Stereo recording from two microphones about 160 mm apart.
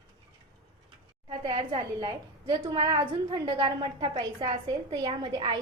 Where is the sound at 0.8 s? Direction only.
30° right (ahead or behind).